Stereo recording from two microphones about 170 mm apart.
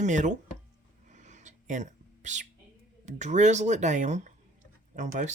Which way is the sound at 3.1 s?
45° right (ahead or behind).